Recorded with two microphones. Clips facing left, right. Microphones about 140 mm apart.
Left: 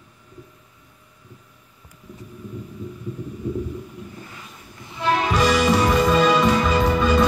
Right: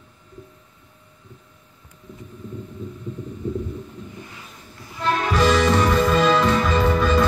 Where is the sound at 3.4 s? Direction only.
10° left (ahead or behind).